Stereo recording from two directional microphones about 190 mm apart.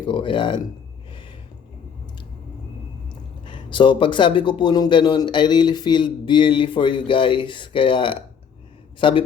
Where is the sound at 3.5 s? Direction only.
25° left (ahead or behind).